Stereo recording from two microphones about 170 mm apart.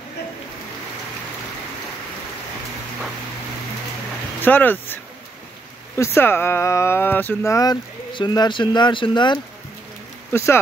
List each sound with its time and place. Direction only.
4.4 s speech: 10° left (ahead or behind)
5.9 s speech: 15° left (ahead or behind)
10.3 s speech: 15° left (ahead or behind)